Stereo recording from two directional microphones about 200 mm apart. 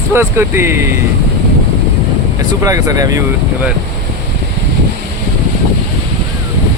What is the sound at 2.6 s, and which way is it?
Speech, 15° right (ahead or behind).